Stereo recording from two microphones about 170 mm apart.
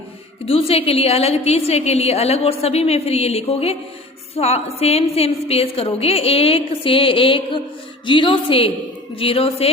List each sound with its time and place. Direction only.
0.4 s a woman's voice: 35° left (ahead or behind)